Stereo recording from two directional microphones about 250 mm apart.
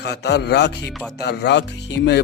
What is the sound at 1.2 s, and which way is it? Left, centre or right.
Speech, left.